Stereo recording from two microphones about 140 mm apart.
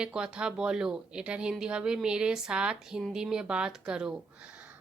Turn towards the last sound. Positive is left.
turn(degrees=-5)  # may be behind; listen again after turning